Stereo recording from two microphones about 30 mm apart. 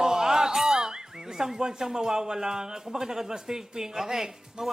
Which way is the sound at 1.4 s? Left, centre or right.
Centre.